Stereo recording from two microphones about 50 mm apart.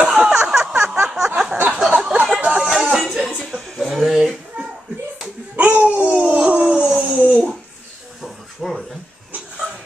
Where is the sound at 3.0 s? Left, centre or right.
Centre.